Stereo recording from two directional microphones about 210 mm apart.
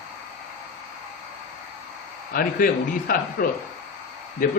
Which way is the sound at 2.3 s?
45° left (ahead or behind).